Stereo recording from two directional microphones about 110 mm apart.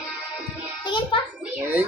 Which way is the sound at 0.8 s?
45° left (ahead or behind).